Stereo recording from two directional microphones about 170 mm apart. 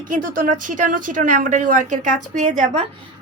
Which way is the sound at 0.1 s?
50° right (ahead or behind).